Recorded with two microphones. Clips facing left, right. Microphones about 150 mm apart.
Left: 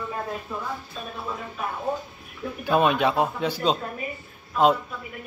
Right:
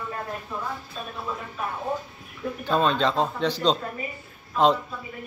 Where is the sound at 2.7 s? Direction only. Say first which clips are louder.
Left 2 dB; 15° left (ahead or behind).